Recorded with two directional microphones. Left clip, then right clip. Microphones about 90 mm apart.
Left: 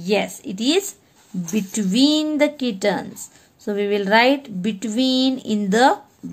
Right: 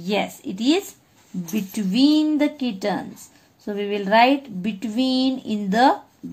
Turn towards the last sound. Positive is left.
turn(degrees=15)  # may be behind; listen again after turning